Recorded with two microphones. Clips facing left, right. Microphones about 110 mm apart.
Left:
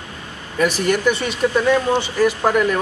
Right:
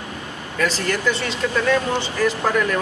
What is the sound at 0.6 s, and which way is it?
Speech, 15° left (ahead or behind).